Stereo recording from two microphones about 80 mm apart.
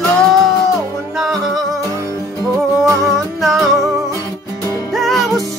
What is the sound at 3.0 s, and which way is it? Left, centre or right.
Humming, centre.